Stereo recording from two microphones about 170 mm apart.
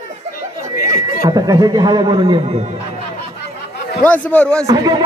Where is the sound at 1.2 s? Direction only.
20° right (ahead or behind).